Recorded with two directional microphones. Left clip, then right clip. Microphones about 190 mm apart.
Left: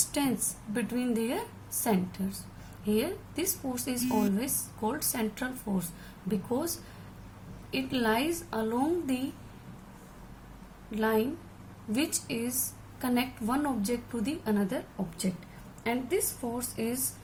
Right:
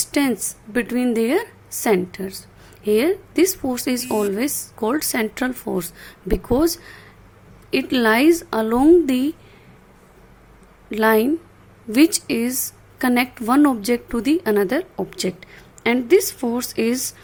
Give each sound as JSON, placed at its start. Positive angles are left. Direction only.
{"t": 0.1, "sound": "a woman's voice", "side_deg": -45}
{"t": 7.7, "sound": "a woman's voice", "side_deg": -50}
{"t": 10.9, "sound": "a woman's voice", "side_deg": -55}
{"t": 15.3, "sound": "a woman's voice", "side_deg": -70}
{"t": 15.8, "sound": "a woman's voice", "side_deg": -55}